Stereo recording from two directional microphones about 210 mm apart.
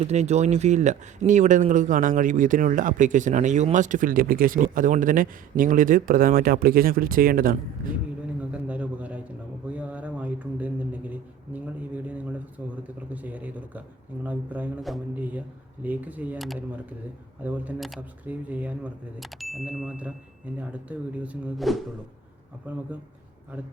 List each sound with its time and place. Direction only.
0.0 s speech: 30° right (ahead or behind)
8.4 s a sound: 5° right (ahead or behind)
17.4 s speech: 5° right (ahead or behind)